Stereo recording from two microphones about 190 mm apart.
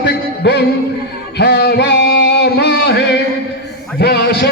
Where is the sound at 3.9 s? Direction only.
60° left (ahead or behind).